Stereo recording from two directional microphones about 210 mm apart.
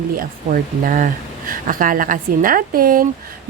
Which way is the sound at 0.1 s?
40° right (ahead or behind).